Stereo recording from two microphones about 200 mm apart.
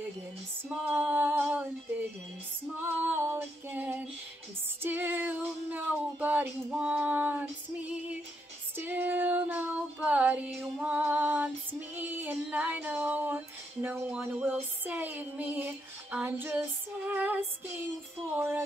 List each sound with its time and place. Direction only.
0.9 s a sound: 10° right (ahead or behind)
2.8 s female singing: 10° right (ahead or behind)
8.7 s child singing: 10° right (ahead or behind)
13.8 s music: 10° right (ahead or behind)